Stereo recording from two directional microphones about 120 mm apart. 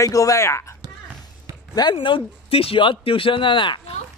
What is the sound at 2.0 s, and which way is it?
Speech, 50° left (ahead or behind).